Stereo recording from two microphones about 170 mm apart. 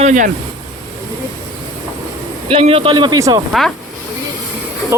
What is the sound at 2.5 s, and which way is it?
Speech, 35° right (ahead or behind).